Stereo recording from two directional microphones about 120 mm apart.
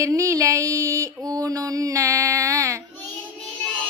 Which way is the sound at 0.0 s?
25° right (ahead or behind).